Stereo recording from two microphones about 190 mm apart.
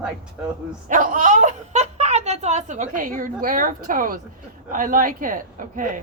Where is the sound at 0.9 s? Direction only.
45° right (ahead or behind).